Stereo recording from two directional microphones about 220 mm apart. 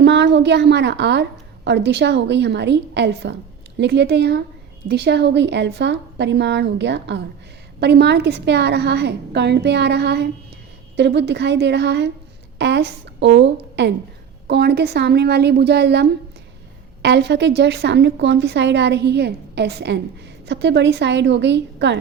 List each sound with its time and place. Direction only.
0.0 s a woman's voice: 50° right (ahead or behind)